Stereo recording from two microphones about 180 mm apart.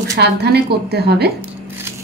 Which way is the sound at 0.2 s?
65° right (ahead or behind).